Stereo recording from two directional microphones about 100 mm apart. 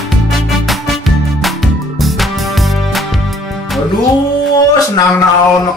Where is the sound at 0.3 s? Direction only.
Centre (ahead or behind).